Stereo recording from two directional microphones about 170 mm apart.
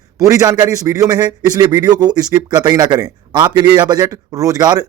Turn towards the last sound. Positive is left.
turn(degrees=-25)  # may be behind; listen again after turning